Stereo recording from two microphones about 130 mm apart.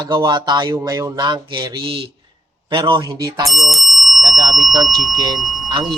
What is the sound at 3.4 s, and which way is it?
Bicycle bell, centre (ahead or behind).